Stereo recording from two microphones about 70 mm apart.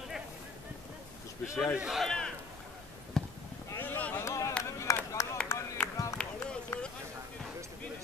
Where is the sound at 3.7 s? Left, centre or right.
Left.